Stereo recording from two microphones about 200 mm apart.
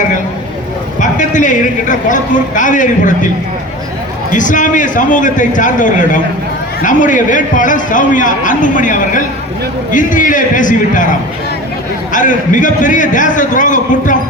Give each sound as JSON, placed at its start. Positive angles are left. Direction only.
{"t": 0.9, "sound": "a woman's voice", "side_deg": 40}
{"t": 4.3, "sound": "a man's voice", "side_deg": 40}
{"t": 12.1, "sound": "a man's voice", "side_deg": 40}